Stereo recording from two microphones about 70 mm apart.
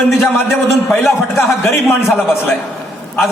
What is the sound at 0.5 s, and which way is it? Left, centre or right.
A man's voice, left.